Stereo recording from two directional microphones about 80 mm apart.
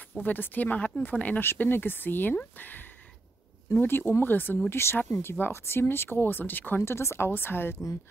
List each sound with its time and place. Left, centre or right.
0.2 s speech: left